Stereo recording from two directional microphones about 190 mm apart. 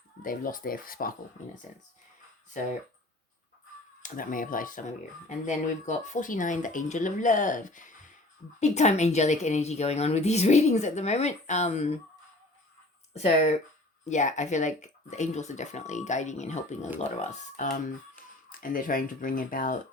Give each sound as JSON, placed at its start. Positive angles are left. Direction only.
{"t": 0.2, "sound": "speech", "side_deg": 45}
{"t": 4.0, "sound": "a woman's voice", "side_deg": 45}
{"t": 13.1, "sound": "a woman's voice", "side_deg": 35}